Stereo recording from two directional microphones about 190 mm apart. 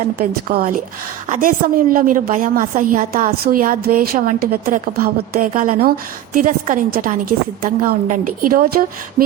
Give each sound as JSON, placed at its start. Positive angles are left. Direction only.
{"t": 0.2, "sound": "a woman's voice", "side_deg": -50}